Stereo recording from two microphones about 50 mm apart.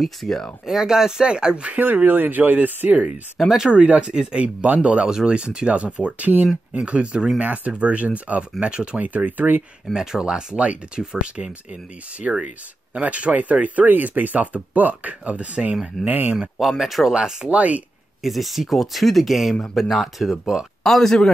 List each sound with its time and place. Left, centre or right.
0.0 s speech: centre
0.7 s speech: centre
1.8 s speech: right
3.5 s speech: centre
3.8 s speech: right
5.0 s speech: centre; by 9.6 s right
9.9 s speech: centre; by 16.3 s right
16.3 s speech: centre
17.1 s speech: centre
17.5 s speech: right
18.2 s speech: centre